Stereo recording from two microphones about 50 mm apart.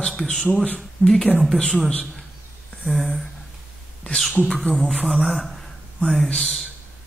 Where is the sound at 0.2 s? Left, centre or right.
Centre.